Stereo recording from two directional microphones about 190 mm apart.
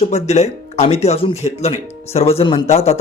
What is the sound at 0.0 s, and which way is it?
Speech, 35° left (ahead or behind).